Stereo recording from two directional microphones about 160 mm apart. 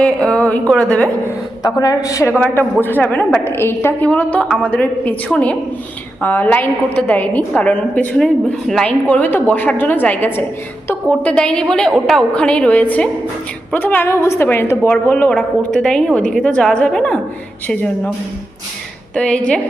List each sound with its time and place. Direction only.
0.0 s a woman's voice: 5° left (ahead or behind)
1.6 s a woman's voice: 25° left (ahead or behind); by 18.1 s 5° left (ahead or behind)
19.1 s a woman's voice: 5° left (ahead or behind)